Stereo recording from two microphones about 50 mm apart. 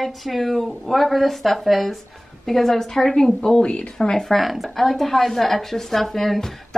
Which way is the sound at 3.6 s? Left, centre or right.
Left.